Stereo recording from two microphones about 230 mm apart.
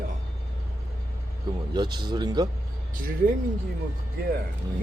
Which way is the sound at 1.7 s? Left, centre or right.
Centre.